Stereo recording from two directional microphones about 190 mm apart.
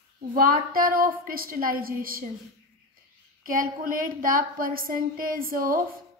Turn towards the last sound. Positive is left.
turn(degrees=-50)  # may be behind; listen again after turning